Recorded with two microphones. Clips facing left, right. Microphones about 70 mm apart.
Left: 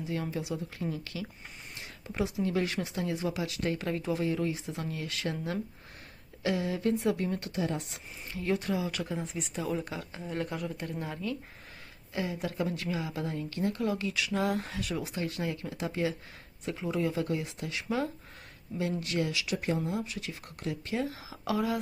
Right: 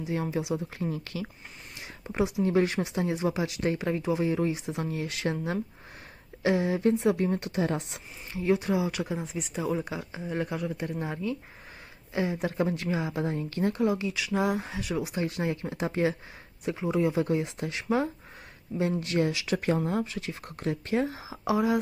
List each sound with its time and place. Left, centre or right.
0.0 s speech: right
0.9 s speech: right
2.0 s speech: right
11.0 s speech: right
13.7 s speech: centre
14.1 s speech: centre
15.1 s speech: right
16.6 s speech: centre
19.6 s speech: right
20.2 s speech: right